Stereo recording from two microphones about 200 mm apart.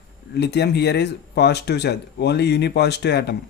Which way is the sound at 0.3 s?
55° left (ahead or behind).